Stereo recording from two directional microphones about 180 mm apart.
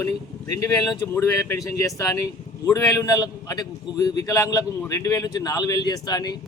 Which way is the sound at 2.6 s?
20° left (ahead or behind).